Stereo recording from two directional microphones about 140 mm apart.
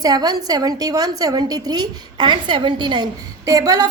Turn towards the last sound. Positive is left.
turn(degrees=-25)  # may be behind; listen again after turning